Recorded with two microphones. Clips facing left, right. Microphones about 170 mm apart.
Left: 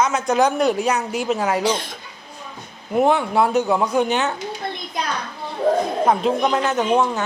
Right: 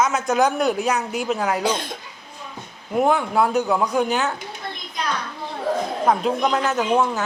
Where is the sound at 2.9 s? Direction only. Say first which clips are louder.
Left 2 dB; centre (ahead or behind).